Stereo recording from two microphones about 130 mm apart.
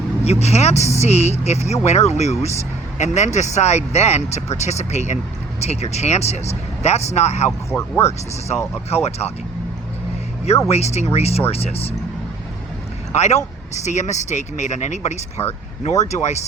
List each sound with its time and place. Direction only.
0.3 s speech: 55° left (ahead or behind)
7.7 s speech: 20° left (ahead or behind)
9.0 s speech: 55° left (ahead or behind)
10.7 s speech: 55° left (ahead or behind)
13.1 s speech: 65° left (ahead or behind)